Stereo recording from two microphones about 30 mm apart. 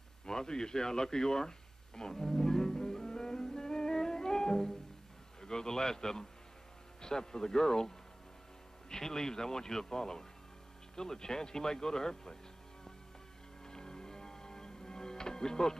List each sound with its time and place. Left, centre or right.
0.2 s speech: left
2.0 s music: left
5.4 s speech: left
13.7 s music: left